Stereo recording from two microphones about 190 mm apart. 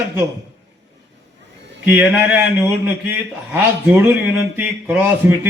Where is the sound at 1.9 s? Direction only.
10° right (ahead or behind).